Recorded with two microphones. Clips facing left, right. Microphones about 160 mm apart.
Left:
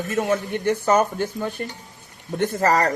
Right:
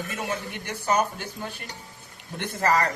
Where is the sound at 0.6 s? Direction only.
55° left (ahead or behind).